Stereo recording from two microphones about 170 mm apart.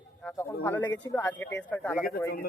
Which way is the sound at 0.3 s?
10° left (ahead or behind).